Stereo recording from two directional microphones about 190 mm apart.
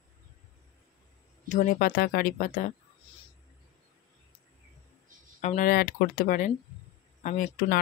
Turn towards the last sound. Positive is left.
turn(degrees=45)  # may be behind; listen again after turning